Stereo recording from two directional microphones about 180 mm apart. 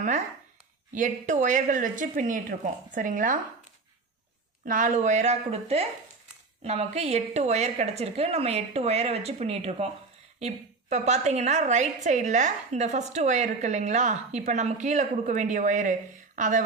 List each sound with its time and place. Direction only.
0.9 s speech: 45° right (ahead or behind)
4.6 s a woman's voice: 45° right (ahead or behind)